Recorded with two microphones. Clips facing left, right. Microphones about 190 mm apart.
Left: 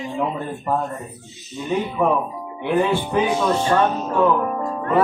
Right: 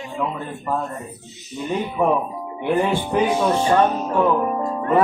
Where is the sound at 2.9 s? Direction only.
10° right (ahead or behind).